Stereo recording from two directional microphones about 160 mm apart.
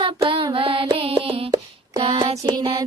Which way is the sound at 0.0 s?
35° right (ahead or behind).